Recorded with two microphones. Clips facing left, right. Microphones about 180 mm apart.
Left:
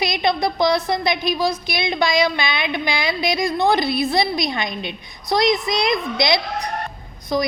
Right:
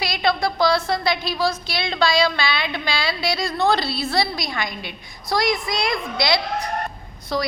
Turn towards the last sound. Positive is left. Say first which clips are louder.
# left 3 dB
turn(degrees=15)  # may be behind; listen again after turning